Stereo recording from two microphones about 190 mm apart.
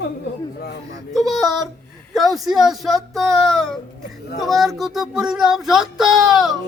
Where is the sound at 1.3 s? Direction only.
Centre (ahead or behind).